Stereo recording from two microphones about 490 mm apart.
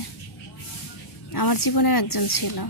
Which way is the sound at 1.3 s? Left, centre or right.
Left.